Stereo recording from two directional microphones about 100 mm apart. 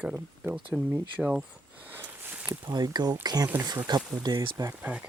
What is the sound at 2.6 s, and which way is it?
Speech, 45° right (ahead or behind).